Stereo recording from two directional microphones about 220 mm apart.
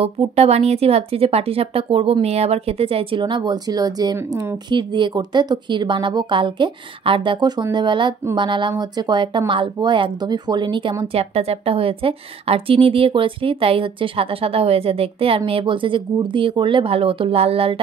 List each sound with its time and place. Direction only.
0.0 s speech: 25° right (ahead or behind)